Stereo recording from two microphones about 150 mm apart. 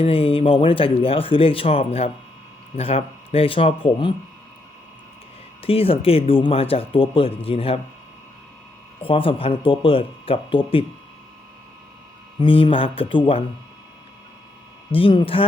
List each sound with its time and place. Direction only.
0.0 s speech: 40° left (ahead or behind)
5.6 s speech: 40° left (ahead or behind)
9.0 s speech: 35° left (ahead or behind)
12.4 s speech: 35° left (ahead or behind)
14.9 s speech: 35° left (ahead or behind)